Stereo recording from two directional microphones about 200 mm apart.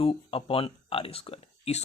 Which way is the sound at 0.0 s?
30° left (ahead or behind).